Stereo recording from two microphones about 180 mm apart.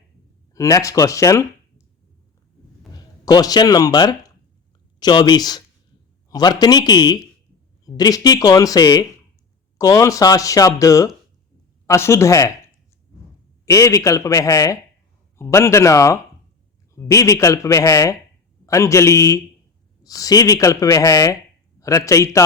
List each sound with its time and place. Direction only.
0.5 s speech: 15° left (ahead or behind)
3.2 s speech: 20° left (ahead or behind)